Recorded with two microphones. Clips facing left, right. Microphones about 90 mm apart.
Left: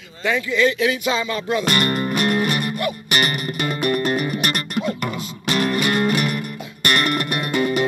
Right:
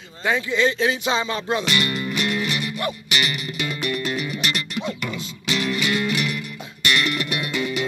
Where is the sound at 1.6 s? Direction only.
45° left (ahead or behind).